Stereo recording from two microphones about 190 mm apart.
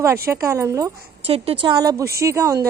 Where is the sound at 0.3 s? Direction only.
15° right (ahead or behind).